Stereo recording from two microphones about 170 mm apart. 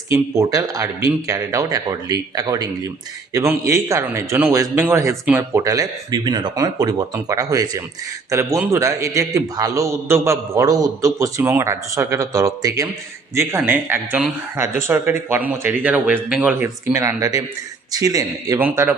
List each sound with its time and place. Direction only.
0.1 s a man's voice: 20° right (ahead or behind)